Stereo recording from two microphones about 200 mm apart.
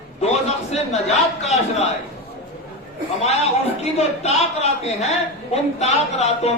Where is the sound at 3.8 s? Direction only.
35° left (ahead or behind).